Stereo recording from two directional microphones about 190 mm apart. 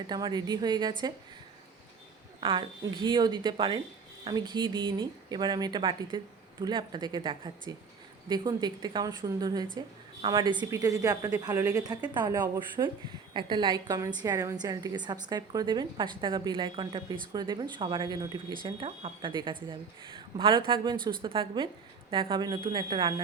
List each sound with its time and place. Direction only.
0.1 s a woman's voice: 20° right (ahead or behind)
2.4 s a woman's voice: 25° right (ahead or behind)